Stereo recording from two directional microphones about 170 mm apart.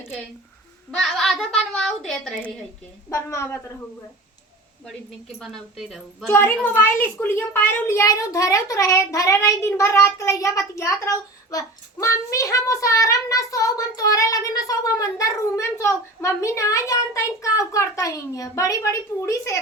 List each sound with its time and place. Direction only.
1.1 s a woman's voice: centre (ahead or behind)
3.1 s a woman's voice: 15° left (ahead or behind)
5.4 s a woman's voice: centre (ahead or behind)
6.2 s a woman's voice: 15° left (ahead or behind)